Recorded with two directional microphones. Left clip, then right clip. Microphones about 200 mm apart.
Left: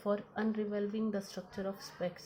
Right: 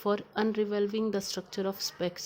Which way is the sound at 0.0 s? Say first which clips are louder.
Right 6 dB; 55° right (ahead or behind).